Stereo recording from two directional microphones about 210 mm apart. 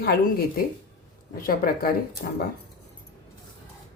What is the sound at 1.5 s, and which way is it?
Speech, 45° left (ahead or behind).